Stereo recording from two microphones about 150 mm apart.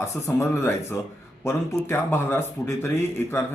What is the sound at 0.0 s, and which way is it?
Speech, 20° left (ahead or behind).